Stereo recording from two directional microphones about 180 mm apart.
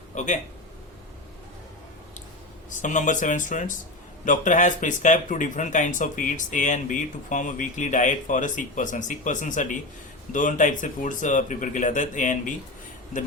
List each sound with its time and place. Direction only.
0.2 s a man's voice: 40° left (ahead or behind)
2.6 s speech: 45° left (ahead or behind)